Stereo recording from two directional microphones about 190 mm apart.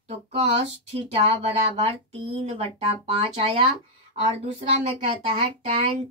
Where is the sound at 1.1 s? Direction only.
30° right (ahead or behind).